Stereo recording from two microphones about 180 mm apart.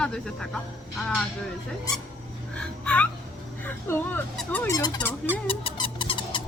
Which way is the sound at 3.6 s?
10° left (ahead or behind).